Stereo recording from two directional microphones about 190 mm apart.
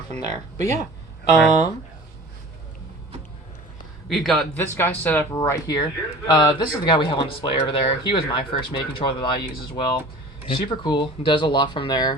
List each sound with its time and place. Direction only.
0.2 s speech: 20° left (ahead or behind)
4.1 s a man's voice: centre (ahead or behind)
4.6 s speech: 10° left (ahead or behind)